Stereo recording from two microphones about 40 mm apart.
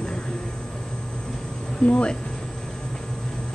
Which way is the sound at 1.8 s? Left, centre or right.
Left.